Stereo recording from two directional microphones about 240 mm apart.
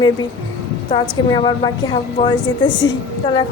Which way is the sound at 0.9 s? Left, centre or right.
Centre.